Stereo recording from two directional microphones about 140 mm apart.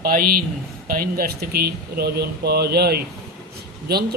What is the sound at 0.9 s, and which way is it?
Speech, 90° right.